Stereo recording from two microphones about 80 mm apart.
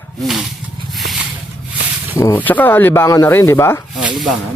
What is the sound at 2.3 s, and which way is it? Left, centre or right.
Speech, left.